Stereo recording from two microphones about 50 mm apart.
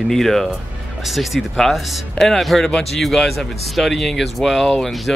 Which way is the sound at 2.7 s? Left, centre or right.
Centre.